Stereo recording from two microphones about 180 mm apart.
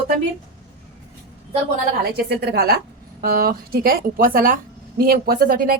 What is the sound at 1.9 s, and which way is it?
A woman's voice, 65° right (ahead or behind).